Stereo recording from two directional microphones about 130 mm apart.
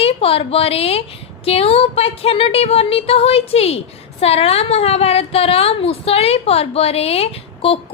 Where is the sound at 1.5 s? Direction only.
50° left (ahead or behind).